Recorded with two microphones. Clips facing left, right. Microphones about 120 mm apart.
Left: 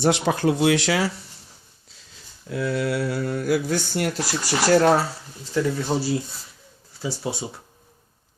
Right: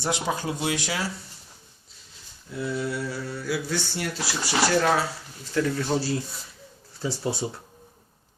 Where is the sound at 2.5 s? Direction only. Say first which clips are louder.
Left 5 dB; 90° left; by 5.0 s 40° left (ahead or behind).